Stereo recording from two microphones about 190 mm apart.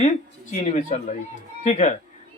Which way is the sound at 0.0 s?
40° left (ahead or behind).